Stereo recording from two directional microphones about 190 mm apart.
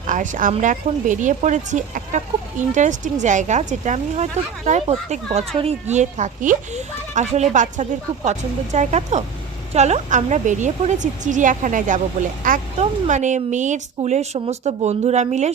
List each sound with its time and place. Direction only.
0.1 s a woman's voice: 45° right (ahead or behind)